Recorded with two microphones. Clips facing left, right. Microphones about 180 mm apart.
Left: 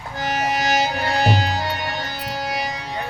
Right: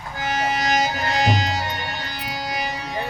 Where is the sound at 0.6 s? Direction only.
35° left (ahead or behind).